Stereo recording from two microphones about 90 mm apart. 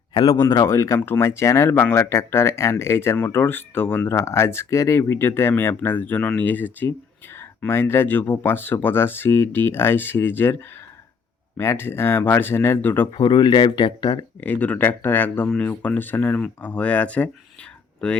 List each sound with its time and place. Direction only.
0.1 s speech: 65° left (ahead or behind)
0.4 s speech: 40° left (ahead or behind)
1.7 s speech: 20° left (ahead or behind)
13.1 s speech: 60° left (ahead or behind)
14.4 s speech: 15° left (ahead or behind)